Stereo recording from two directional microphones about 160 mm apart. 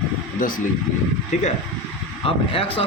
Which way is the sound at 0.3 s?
60° left (ahead or behind).